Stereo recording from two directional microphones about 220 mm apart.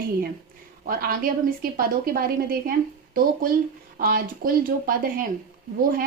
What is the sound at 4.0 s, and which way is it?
Speech, 40° right (ahead or behind).